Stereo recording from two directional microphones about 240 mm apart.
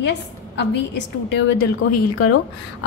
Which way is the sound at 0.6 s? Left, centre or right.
Left.